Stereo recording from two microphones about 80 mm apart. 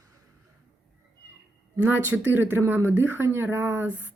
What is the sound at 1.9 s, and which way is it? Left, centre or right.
Speech, right.